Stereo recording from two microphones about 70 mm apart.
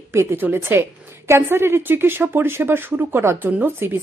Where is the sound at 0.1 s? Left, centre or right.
Right.